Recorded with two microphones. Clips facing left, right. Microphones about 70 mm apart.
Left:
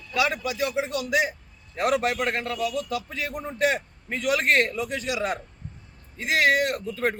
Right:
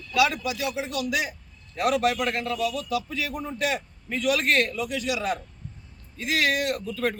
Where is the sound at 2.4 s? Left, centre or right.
Left.